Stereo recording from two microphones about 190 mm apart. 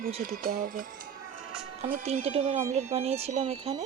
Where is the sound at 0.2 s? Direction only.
50° right (ahead or behind).